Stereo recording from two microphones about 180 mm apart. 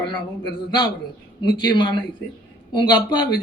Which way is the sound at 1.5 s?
25° left (ahead or behind).